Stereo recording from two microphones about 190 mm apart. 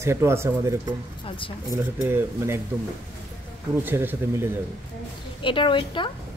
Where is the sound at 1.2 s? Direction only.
25° left (ahead or behind).